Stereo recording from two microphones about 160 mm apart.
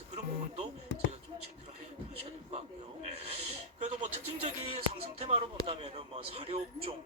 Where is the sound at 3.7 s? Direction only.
45° right (ahead or behind).